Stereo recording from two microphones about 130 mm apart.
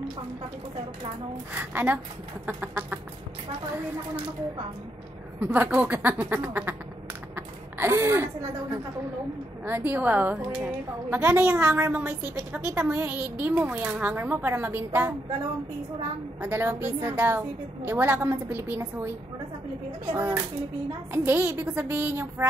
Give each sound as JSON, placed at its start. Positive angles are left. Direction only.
{"t": 1.6, "sound": "a woman's voice", "side_deg": -15}
{"t": 5.4, "sound": "a woman's voice", "side_deg": -10}
{"t": 7.3, "sound": "gasp", "side_deg": -20}
{"t": 9.7, "sound": "a woman's voice", "side_deg": -15}
{"t": 16.3, "sound": "a woman's voice", "side_deg": -15}